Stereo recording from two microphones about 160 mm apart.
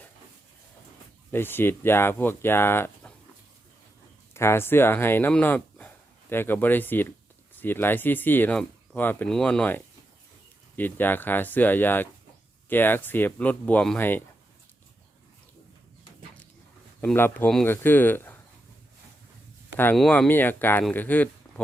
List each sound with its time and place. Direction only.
1.3 s speech: 15° left (ahead or behind)
4.4 s speech: 15° left (ahead or behind)
17.0 s speech: 10° left (ahead or behind)
19.7 s speech: 10° left (ahead or behind)
21.5 s a sound: 20° left (ahead or behind)